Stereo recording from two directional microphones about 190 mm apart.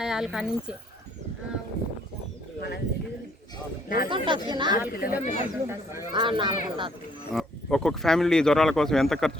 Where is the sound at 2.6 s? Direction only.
60° left (ahead or behind).